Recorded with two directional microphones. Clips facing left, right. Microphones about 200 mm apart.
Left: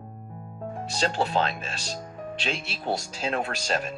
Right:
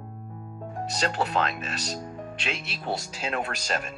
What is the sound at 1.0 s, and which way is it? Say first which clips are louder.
Speech: left 2 dB; 30° left (ahead or behind).